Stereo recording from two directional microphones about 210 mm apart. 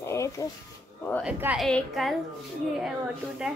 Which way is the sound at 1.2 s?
5° right (ahead or behind).